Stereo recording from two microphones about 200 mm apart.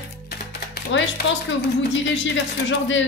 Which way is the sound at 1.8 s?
65° left (ahead or behind).